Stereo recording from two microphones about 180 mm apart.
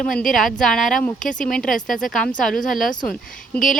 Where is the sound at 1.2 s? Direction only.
45° left (ahead or behind).